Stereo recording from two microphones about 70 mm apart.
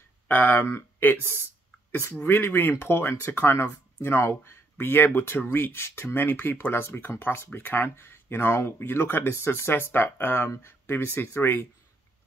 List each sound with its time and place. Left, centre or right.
0.3 s speech: left